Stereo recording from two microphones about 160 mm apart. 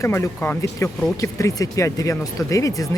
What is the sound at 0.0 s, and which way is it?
Speech, 15° left (ahead or behind).